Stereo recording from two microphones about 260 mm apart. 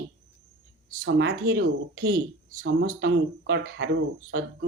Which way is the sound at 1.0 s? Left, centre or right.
Right.